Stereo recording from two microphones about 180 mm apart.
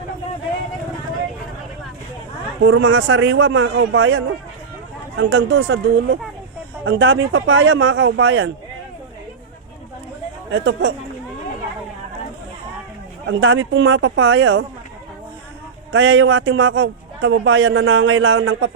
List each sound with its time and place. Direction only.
2.6 s a man's voice: 85° right
10.5 s a man's voice: 85° right
13.2 s a man's voice: 90° right
15.9 s a man's voice: 90° right